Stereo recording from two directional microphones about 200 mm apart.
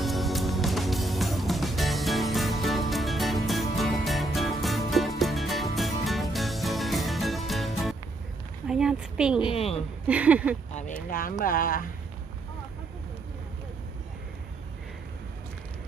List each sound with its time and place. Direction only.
0.0 s music: centre (ahead or behind)
8.6 s a sound: 5° right (ahead or behind)
9.4 s a woman's voice: 30° left (ahead or behind)
10.1 s speech: 5° right (ahead or behind)
10.8 s speech: 40° left (ahead or behind)